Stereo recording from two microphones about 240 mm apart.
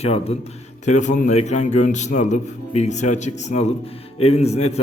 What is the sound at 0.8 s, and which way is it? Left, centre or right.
A man's voice, left.